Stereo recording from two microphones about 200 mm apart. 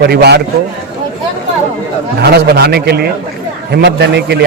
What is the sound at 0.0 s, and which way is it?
Speech, 55° right (ahead or behind).